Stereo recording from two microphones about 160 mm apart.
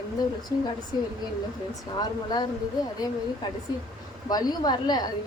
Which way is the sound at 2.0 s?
25° left (ahead or behind).